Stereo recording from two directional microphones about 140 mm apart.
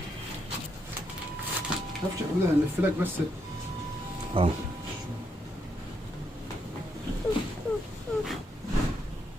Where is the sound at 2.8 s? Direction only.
15° right (ahead or behind).